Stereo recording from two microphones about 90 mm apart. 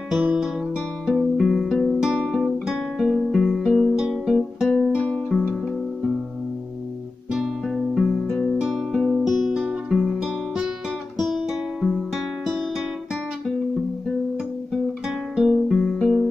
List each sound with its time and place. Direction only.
1.0 s music: 5° right (ahead or behind)
2.0 s music: 10° right (ahead or behind)
4.7 s music: 15° left (ahead or behind)
7.7 s music: centre (ahead or behind)
15.3 s music: 5° right (ahead or behind)